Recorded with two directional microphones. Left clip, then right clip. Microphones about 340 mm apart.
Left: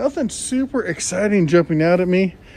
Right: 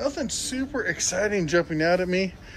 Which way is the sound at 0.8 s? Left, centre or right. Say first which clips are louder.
Left 1 dB; centre.